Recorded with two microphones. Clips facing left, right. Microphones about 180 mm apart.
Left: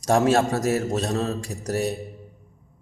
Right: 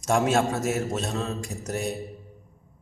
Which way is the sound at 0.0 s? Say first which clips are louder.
Left 3 dB; 35° left (ahead or behind).